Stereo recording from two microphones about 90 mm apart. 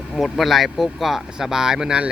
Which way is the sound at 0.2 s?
Centre (ahead or behind).